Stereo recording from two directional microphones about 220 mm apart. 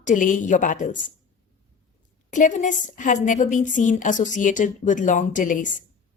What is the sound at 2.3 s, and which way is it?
A woman's voice, 35° left (ahead or behind).